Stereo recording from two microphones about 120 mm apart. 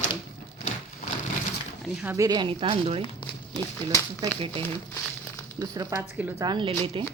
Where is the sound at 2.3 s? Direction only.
40° right (ahead or behind).